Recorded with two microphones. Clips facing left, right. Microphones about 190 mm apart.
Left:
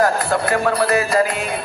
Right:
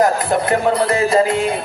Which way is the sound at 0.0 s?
20° right (ahead or behind).